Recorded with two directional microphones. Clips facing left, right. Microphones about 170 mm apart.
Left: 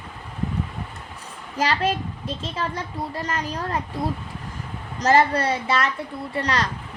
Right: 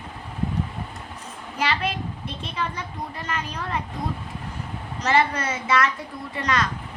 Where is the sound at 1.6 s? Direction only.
40° left (ahead or behind).